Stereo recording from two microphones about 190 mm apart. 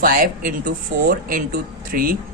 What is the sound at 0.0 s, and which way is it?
A man's voice, 45° right (ahead or behind).